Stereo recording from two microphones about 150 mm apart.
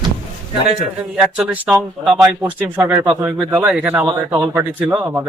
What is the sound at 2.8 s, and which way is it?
Speech, 25° right (ahead or behind).